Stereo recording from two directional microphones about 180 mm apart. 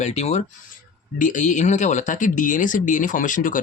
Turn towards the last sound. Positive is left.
turn(degrees=45)  # may be behind; listen again after turning